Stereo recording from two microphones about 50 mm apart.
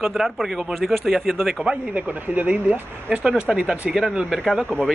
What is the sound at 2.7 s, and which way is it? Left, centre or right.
A man's voice, centre.